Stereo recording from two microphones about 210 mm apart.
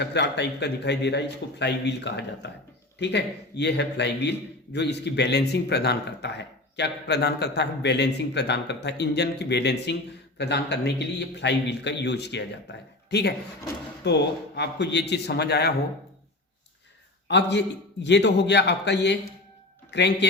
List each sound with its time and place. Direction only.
0.0 s a man's voice: 55° left (ahead or behind)
17.2 s a man's voice: 55° left (ahead or behind)